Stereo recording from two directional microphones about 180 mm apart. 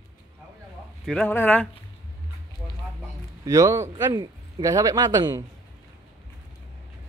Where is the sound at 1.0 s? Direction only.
5° left (ahead or behind).